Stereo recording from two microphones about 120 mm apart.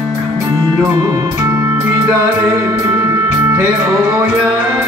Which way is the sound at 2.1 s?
15° right (ahead or behind).